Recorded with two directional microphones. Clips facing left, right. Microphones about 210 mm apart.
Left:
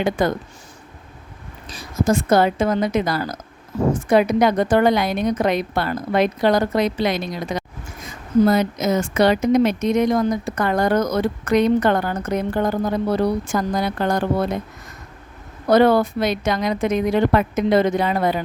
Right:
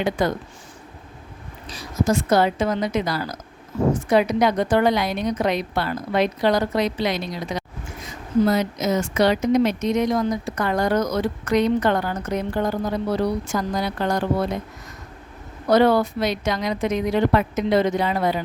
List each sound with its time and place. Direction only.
0.2 s speech: 50° left (ahead or behind)
1.7 s speech: 50° left (ahead or behind)
15.7 s speech: 55° left (ahead or behind)